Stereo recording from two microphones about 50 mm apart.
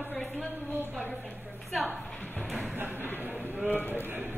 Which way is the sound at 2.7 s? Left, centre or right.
Right.